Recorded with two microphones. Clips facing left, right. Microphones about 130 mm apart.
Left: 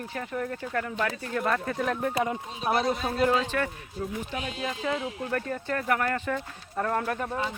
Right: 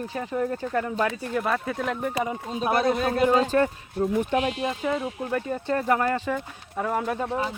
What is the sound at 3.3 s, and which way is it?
Speech, 40° right (ahead or behind).